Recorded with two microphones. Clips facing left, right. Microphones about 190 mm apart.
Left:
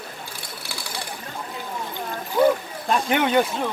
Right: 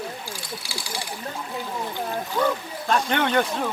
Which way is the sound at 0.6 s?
60° left (ahead or behind).